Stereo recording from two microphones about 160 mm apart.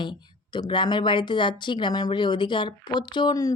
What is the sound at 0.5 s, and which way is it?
Speech, 30° left (ahead or behind).